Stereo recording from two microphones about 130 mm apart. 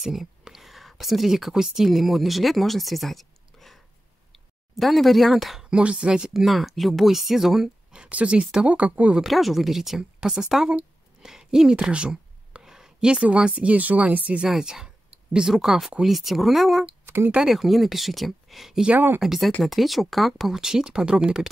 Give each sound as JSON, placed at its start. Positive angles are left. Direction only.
{"t": 0.0, "sound": "a woman's voice", "side_deg": 0}
{"t": 17.0, "sound": "a sound", "side_deg": -20}
{"t": 17.3, "sound": "speech", "side_deg": -5}
{"t": 19.2, "sound": "speech", "side_deg": 0}